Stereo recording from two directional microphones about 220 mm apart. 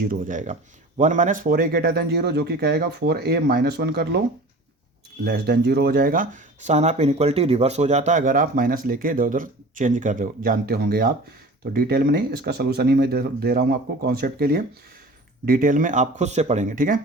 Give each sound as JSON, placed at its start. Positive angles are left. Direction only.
{"t": 0.0, "sound": "speech", "side_deg": -40}
{"t": 5.2, "sound": "speech", "side_deg": -45}